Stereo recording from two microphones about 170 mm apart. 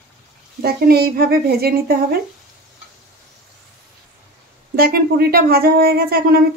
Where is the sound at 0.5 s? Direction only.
65° right (ahead or behind).